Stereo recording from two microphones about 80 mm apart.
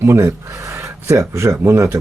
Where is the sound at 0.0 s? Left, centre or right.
Right.